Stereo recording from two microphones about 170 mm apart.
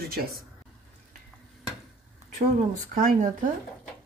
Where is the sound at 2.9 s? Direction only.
55° right (ahead or behind).